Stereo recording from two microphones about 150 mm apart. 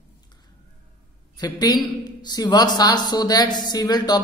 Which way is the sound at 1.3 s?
25° left (ahead or behind).